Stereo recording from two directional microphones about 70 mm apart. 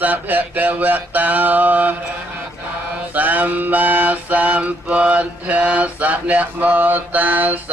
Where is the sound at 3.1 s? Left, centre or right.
Right.